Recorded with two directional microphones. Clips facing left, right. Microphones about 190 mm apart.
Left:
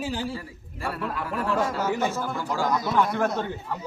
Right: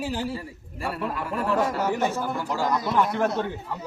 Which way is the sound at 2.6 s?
5° left (ahead or behind).